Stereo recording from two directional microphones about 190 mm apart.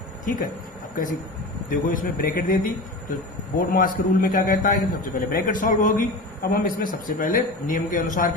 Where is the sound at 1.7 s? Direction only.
45° left (ahead or behind).